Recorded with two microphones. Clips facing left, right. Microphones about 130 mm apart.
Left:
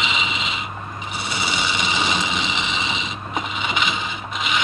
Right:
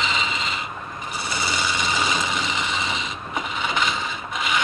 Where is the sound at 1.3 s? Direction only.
90° left.